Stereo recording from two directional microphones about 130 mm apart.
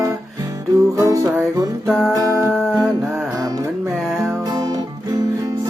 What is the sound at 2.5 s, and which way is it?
Music, centre (ahead or behind).